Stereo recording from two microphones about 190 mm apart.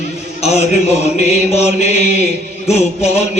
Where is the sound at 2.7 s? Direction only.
35° left (ahead or behind).